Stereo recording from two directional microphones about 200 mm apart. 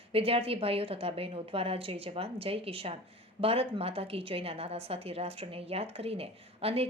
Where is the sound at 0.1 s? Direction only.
30° right (ahead or behind).